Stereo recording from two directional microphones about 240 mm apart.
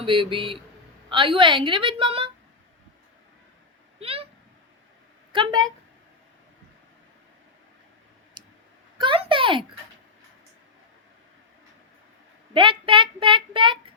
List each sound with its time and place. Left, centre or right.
0.0 s speech: right
4.0 s a sound: right
5.3 s speech: centre
8.4 s clicking: centre
9.0 s a sound: right
12.5 s speech: right